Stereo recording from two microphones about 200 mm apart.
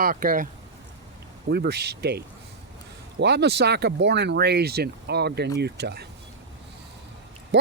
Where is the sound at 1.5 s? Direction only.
55° right (ahead or behind).